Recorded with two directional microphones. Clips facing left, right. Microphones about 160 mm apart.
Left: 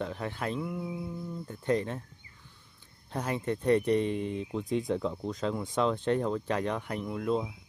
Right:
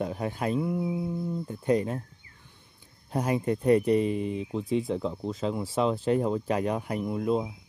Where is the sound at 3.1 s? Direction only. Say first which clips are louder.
Right 5 dB; 10° right (ahead or behind).